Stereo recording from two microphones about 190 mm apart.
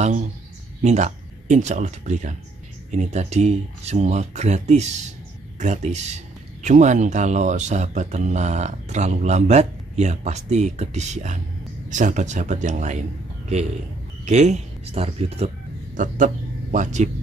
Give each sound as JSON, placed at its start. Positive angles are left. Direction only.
{"t": 0.0, "sound": "speech", "side_deg": -35}
{"t": 14.2, "sound": "speech", "side_deg": -40}
{"t": 16.7, "sound": "speech", "side_deg": -40}